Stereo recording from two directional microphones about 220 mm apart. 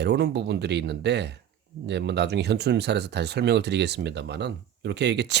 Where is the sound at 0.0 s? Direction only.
50° right (ahead or behind).